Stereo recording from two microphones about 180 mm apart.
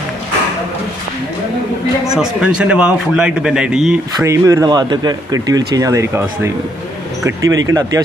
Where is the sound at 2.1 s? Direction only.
5° right (ahead or behind).